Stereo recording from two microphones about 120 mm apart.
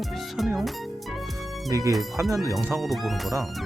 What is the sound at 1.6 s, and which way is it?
Speech, 30° right (ahead or behind).